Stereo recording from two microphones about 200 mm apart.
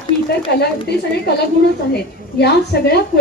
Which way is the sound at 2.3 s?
55° left (ahead or behind).